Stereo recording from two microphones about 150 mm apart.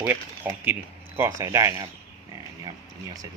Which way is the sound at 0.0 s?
15° right (ahead or behind).